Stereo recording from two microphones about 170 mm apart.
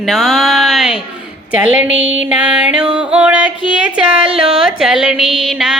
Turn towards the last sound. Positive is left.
turn(degrees=-5)  # may be behind; listen again after turning